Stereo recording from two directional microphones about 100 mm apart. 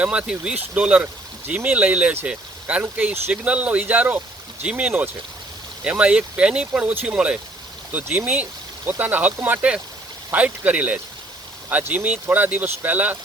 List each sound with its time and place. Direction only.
0.0 s speech: 10° right (ahead or behind)